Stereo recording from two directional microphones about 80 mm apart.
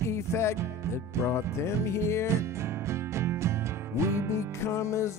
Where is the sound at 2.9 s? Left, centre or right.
Right.